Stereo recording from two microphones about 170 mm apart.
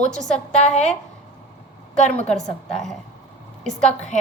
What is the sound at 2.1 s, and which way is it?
Speech, 5° left (ahead or behind).